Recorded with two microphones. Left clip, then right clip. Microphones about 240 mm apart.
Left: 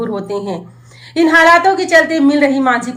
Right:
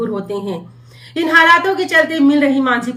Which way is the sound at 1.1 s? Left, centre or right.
Centre.